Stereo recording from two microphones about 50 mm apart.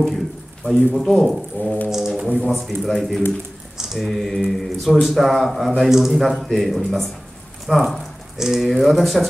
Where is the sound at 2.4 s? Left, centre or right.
Centre.